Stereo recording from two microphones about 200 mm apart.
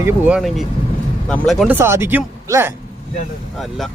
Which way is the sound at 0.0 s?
10° right (ahead or behind).